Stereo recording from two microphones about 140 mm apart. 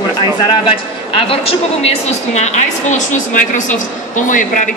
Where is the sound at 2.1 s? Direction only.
55° left (ahead or behind).